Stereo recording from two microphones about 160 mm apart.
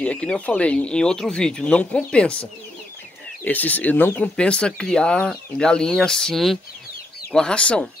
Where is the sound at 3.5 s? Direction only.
10° left (ahead or behind).